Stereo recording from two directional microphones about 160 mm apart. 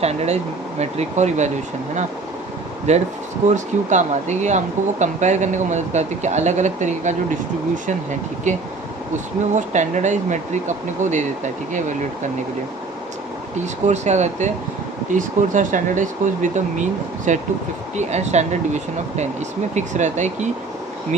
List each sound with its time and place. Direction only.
0.0 s speech: 40° right (ahead or behind)
2.9 s speech: 45° right (ahead or behind)
8.5 s speech: 50° right (ahead or behind)
13.8 s speech: 45° right (ahead or behind)